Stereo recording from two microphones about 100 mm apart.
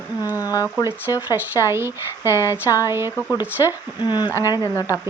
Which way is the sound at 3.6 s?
45° left (ahead or behind).